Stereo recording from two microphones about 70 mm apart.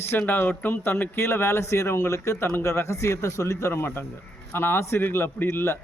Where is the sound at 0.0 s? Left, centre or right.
Left.